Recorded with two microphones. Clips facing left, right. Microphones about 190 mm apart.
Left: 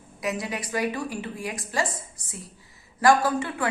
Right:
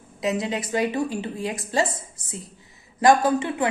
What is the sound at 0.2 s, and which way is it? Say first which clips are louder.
A woman's voice: right 5 dB; 25° right (ahead or behind).